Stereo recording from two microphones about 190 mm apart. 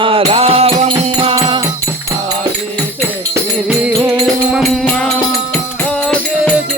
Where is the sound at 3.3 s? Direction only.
10° right (ahead or behind); by 6.5 s 5° left (ahead or behind).